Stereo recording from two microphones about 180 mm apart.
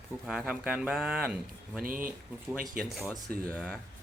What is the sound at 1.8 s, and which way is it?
Speech, 50° right (ahead or behind).